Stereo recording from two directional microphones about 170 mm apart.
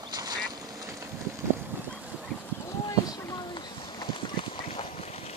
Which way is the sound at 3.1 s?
25° left (ahead or behind).